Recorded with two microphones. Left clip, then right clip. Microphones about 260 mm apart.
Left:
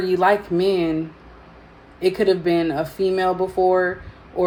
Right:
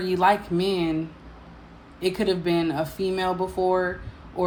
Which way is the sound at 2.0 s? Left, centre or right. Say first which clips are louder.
Left 6 dB; centre.